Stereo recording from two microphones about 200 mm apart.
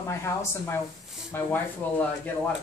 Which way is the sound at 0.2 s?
15° left (ahead or behind).